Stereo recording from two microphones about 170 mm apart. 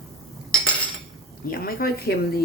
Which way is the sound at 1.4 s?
60° left (ahead or behind).